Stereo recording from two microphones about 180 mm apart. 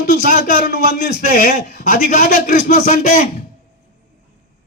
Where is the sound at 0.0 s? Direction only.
55° left (ahead or behind).